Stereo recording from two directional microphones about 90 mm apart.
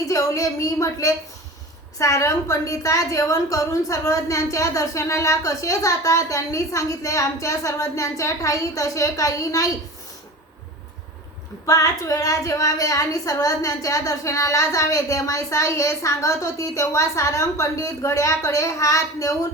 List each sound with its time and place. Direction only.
0.0 s a woman's voice: 40° left (ahead or behind)
11.6 s a woman's voice: 40° left (ahead or behind)